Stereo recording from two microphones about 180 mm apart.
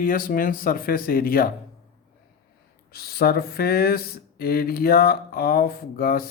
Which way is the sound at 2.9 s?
60° left (ahead or behind).